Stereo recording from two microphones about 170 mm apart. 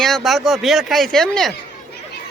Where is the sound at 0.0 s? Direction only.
Centre (ahead or behind).